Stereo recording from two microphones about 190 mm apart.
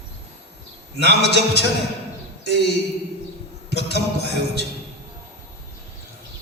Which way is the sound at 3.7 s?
60° left (ahead or behind).